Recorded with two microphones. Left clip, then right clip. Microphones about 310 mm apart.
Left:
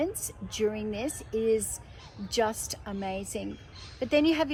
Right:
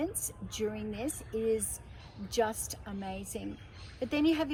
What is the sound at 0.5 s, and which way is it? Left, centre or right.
A woman's voice, centre.